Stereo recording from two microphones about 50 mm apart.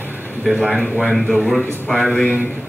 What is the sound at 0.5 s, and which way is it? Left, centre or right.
A man's voice, centre.